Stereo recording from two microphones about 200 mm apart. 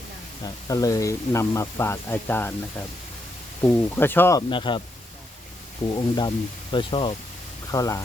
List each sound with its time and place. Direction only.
0.4 s speech: 15° left (ahead or behind)
6.1 s speech: 20° left (ahead or behind)